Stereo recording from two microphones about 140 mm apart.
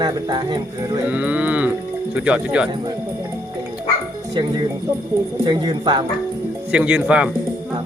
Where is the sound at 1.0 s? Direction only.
10° right (ahead or behind).